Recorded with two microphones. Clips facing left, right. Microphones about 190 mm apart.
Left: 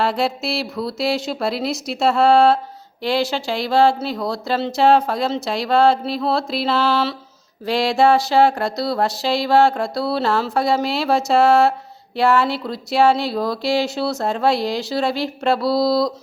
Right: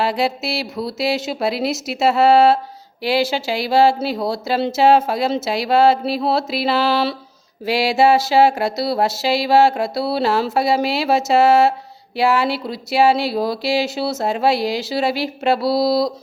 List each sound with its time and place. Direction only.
0.0 s speech: centre (ahead or behind)